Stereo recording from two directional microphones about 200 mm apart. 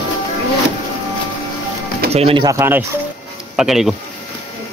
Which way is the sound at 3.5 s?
Centre (ahead or behind).